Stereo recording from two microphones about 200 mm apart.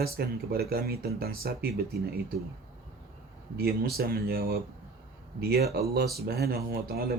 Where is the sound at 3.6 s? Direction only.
50° right (ahead or behind).